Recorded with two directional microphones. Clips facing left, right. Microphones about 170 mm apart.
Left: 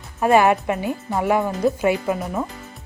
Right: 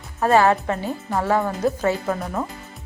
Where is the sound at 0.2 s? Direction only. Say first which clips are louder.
Left 1 dB; 15° left (ahead or behind).